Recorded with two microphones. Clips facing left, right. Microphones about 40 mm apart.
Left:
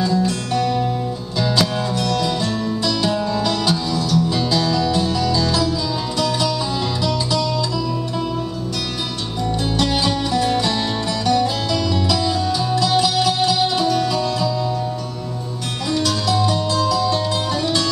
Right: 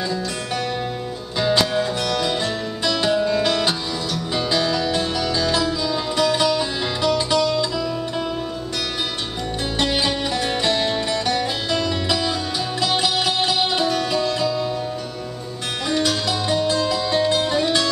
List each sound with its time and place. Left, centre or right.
0.6 s music: centre
9.8 s music: right
15.9 s music: centre